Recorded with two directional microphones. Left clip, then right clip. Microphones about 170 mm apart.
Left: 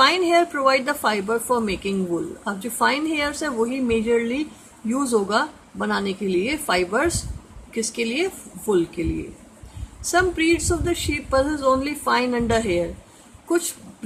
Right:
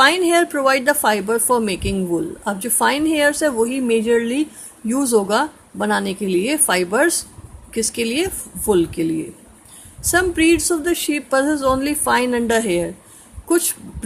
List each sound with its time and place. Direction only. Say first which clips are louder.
0.0 s speech: right 3 dB; 40° right (ahead or behind)
10.1 s speech: right 4 dB; 40° right (ahead or behind)